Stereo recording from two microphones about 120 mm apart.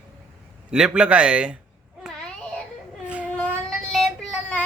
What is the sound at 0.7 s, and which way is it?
Speech, 5° right (ahead or behind).